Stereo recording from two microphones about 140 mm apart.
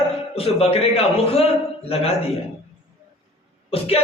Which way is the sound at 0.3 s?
45° left (ahead or behind).